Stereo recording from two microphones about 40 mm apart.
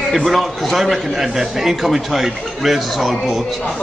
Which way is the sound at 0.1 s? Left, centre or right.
Centre.